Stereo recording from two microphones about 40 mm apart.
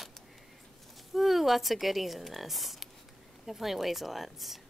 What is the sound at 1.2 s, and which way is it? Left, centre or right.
Speech, centre.